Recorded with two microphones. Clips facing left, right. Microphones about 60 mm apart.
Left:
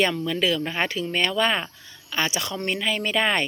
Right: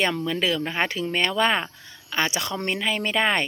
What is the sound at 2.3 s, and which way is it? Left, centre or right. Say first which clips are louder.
Speech: right 1 dB; right.